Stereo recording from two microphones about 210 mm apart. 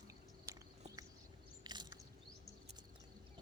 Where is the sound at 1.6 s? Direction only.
20° right (ahead or behind).